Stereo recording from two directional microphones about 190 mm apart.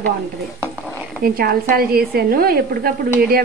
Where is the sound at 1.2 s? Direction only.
50° right (ahead or behind).